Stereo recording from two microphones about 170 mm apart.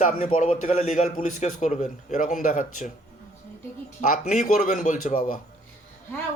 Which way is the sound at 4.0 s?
50° left (ahead or behind).